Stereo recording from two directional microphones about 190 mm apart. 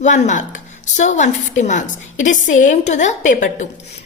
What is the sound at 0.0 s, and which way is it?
A woman's voice, 40° left (ahead or behind).